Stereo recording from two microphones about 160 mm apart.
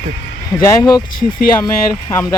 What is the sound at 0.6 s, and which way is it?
Speech, 25° left (ahead or behind).